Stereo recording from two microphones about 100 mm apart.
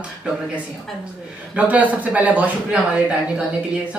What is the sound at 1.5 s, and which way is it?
Speech, 15° right (ahead or behind).